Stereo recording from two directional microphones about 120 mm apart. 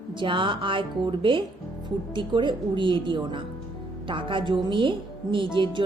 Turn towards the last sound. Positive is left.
turn(degrees=-40)  # may be behind; listen again after turning